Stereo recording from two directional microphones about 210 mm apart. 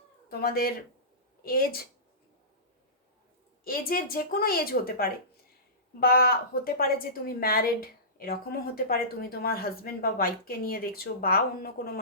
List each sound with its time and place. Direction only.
0.3 s a woman's voice: 45° left (ahead or behind)
3.6 s a woman's voice: 45° left (ahead or behind)